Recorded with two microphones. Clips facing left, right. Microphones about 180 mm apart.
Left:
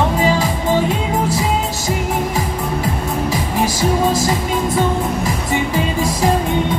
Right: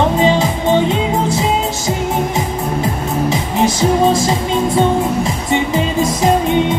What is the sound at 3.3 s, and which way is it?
Music, 25° right (ahead or behind).